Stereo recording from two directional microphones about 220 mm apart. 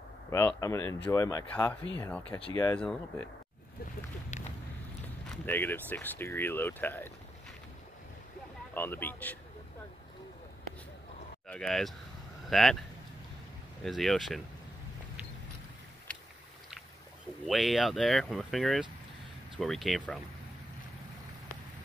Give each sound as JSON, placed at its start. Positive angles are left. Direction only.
{"t": 0.3, "sound": "speech", "side_deg": 10}
{"t": 3.8, "sound": "a sound", "side_deg": 35}
{"t": 5.3, "sound": "speech", "side_deg": 10}
{"t": 8.7, "sound": "speech", "side_deg": 10}
{"t": 11.4, "sound": "speech", "side_deg": 5}
{"t": 13.8, "sound": "speech", "side_deg": 0}
{"t": 16.1, "sound": "a sound", "side_deg": 5}
{"t": 17.5, "sound": "speech", "side_deg": 0}